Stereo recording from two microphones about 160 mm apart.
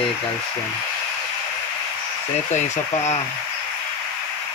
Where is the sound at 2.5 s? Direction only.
45° left (ahead or behind).